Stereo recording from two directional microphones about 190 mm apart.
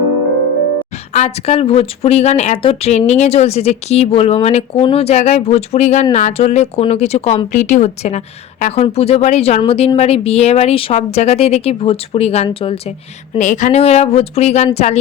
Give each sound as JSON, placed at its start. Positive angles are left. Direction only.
{"t": 1.1, "sound": "speech", "side_deg": 35}
{"t": 13.4, "sound": "speech", "side_deg": 40}